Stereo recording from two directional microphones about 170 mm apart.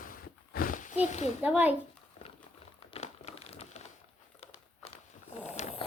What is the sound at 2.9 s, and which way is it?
Crumpling, 35° left (ahead or behind).